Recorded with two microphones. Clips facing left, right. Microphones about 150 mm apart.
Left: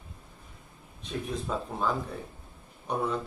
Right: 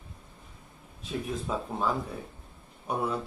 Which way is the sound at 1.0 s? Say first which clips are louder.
Even; 5° right (ahead or behind).